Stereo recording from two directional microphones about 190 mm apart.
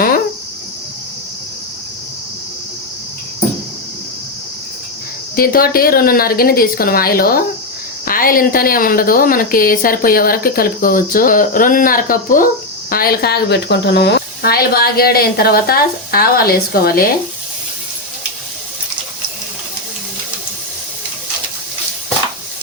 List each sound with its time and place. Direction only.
5.4 s a woman's voice: 50° left (ahead or behind)